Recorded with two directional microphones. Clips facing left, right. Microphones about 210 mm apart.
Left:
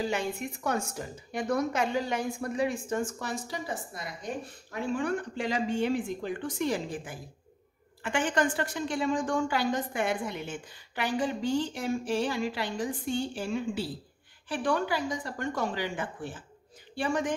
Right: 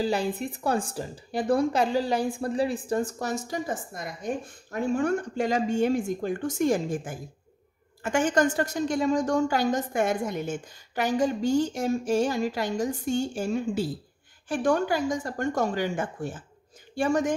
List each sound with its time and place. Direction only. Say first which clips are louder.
0.0 s a woman's voice: right 4 dB; 35° right (ahead or behind)